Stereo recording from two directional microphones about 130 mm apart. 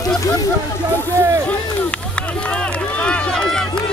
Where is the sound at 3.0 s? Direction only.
5° left (ahead or behind).